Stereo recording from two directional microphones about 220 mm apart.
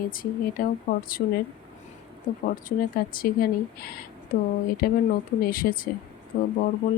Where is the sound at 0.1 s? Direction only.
40° left (ahead or behind).